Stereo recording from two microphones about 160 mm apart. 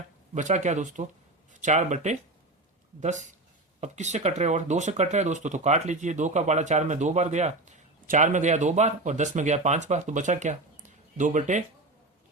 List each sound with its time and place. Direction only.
0.3 s speech: 50° right (ahead or behind)